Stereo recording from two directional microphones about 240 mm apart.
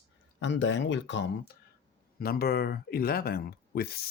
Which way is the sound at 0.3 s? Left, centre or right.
Left.